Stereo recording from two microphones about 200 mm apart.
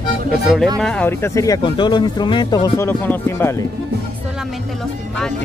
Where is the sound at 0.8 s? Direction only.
10° left (ahead or behind).